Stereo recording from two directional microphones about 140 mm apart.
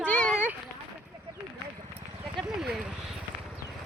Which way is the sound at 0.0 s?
10° left (ahead or behind).